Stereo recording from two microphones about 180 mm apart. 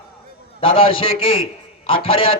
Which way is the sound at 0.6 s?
30° left (ahead or behind).